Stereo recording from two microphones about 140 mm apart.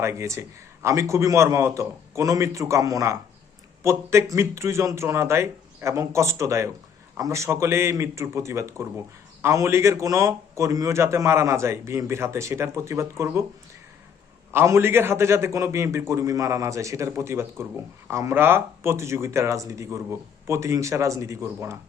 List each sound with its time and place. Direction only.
0.0 s a man's voice: 20° right (ahead or behind)
14.5 s a man's voice: 20° right (ahead or behind)